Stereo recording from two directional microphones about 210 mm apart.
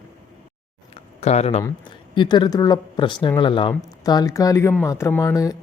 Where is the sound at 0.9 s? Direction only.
30° left (ahead or behind).